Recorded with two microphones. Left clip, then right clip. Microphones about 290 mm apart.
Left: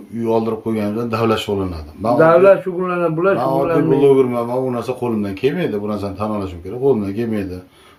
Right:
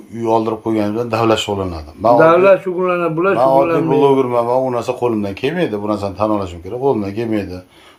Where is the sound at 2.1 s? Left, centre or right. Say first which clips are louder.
Even; right.